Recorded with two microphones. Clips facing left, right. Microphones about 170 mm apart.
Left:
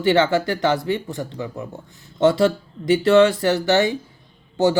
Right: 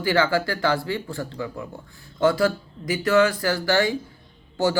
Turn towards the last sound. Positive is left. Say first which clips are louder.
# left 4 dB
turn(degrees=20)  # may be behind; listen again after turning